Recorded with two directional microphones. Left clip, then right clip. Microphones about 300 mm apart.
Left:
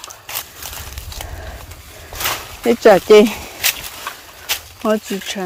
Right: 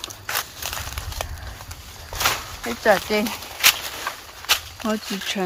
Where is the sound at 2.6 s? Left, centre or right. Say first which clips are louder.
Left 9 dB; left.